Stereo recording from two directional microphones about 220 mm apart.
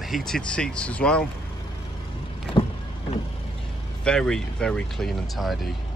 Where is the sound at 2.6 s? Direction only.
20° left (ahead or behind).